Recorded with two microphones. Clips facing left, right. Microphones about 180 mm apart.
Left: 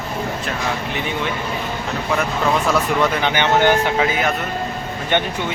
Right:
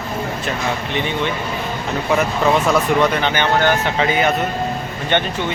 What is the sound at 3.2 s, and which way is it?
Speech, 15° left (ahead or behind).